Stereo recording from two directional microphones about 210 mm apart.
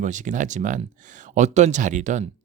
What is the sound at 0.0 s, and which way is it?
Speech, 35° right (ahead or behind).